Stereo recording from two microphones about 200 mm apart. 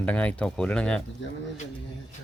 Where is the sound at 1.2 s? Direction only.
65° left (ahead or behind).